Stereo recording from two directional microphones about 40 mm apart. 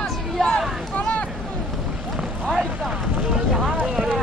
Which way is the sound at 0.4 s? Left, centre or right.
Centre.